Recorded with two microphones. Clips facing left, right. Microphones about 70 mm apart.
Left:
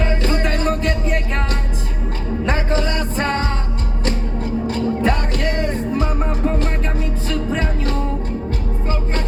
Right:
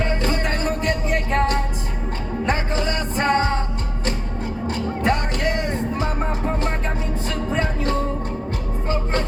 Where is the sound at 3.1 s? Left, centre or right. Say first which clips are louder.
Right 4 dB; centre.